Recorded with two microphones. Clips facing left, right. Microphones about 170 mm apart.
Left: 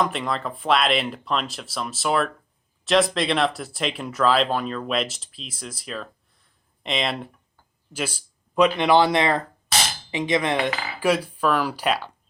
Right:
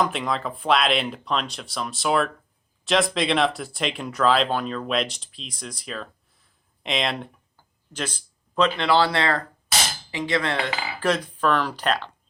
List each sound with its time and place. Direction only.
0.0 s speech: centre (ahead or behind)